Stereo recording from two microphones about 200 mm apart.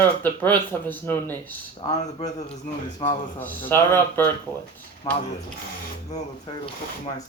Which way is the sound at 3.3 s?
10° left (ahead or behind).